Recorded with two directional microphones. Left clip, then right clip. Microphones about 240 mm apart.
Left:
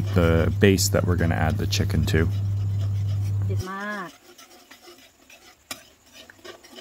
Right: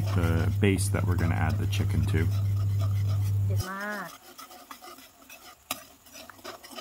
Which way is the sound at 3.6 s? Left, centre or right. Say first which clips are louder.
Left 3 dB; left.